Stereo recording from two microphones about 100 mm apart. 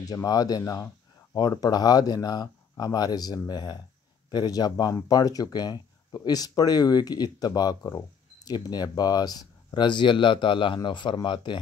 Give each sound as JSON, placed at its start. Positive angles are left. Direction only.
{"t": 0.0, "sound": "speech", "side_deg": 40}